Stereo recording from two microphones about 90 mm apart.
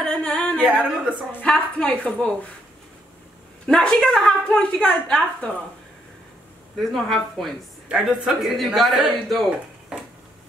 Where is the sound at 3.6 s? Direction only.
5° left (ahead or behind).